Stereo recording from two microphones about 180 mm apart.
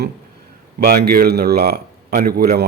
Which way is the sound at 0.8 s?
60° right (ahead or behind).